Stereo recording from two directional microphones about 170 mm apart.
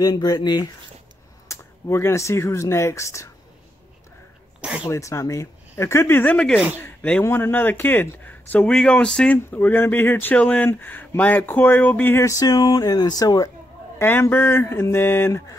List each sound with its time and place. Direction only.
0.0 s speech: 20° left (ahead or behind)
4.6 s sneeze: 5° right (ahead or behind)
4.8 s speech: 15° left (ahead or behind)